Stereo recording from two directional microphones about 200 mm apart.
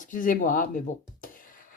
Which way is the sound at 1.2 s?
45° left (ahead or behind).